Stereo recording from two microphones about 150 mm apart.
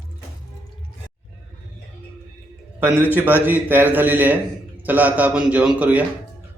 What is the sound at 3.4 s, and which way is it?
A man's voice, 15° right (ahead or behind).